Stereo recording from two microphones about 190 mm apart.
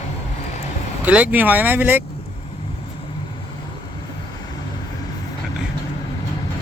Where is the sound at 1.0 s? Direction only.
10° right (ahead or behind).